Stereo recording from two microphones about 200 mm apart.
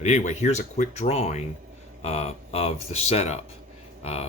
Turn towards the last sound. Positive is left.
turn(degrees=30)  # may be behind; listen again after turning